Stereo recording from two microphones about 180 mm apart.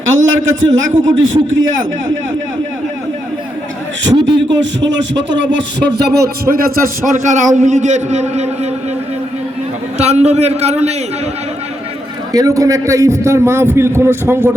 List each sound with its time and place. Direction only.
0.3 s a man's voice: 90° right
4.1 s a man's voice: 25° right (ahead or behind)
4.6 s speech: 85° right; by 6.6 s 65° right (ahead or behind)
7.0 s a man's voice: 45° right (ahead or behind)
10.0 s a man's voice: 35° right (ahead or behind)
12.3 s a man's voice: 20° right (ahead or behind)